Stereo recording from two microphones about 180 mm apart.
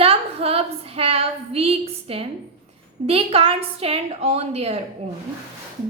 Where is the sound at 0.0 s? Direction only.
35° right (ahead or behind).